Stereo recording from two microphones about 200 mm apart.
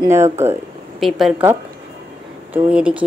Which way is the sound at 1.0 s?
Centre (ahead or behind).